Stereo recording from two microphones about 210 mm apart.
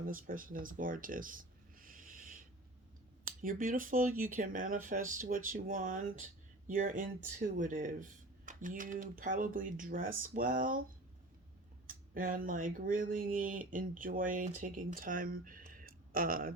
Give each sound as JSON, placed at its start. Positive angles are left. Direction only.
{"t": 0.1, "sound": "a sound", "side_deg": -40}
{"t": 3.4, "sound": "speech", "side_deg": -40}
{"t": 11.9, "sound": "speech", "side_deg": -40}